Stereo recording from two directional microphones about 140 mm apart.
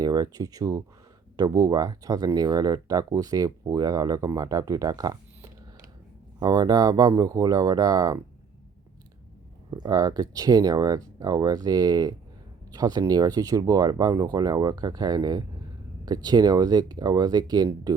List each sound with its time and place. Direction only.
0.0 s speech: 25° right (ahead or behind)
9.6 s speech: 30° right (ahead or behind)